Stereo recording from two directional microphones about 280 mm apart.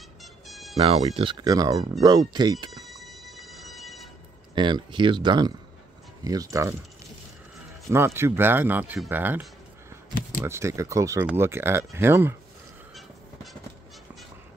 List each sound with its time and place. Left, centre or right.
0.2 s music: centre
0.7 s speech: centre
2.7 s train: centre
4.6 s speech: centre
7.9 s speech: centre
12.9 s train: centre